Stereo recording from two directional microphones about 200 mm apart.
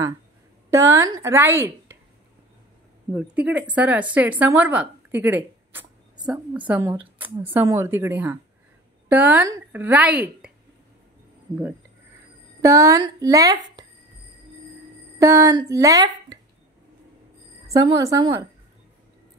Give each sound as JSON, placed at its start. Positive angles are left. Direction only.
{"t": 0.7, "sound": "speech", "side_deg": -15}
{"t": 3.2, "sound": "speech", "side_deg": -5}
{"t": 6.1, "sound": "a sound", "side_deg": -20}
{"t": 6.5, "sound": "speech", "side_deg": -5}
{"t": 12.6, "sound": "speech", "side_deg": -15}
{"t": 15.1, "sound": "speech", "side_deg": -15}
{"t": 17.6, "sound": "speech", "side_deg": -20}